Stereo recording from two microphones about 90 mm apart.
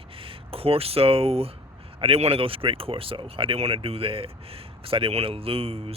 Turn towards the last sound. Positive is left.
turn(degrees=-90)